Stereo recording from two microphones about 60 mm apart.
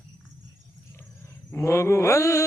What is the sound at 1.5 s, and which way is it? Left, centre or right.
Mantra, left.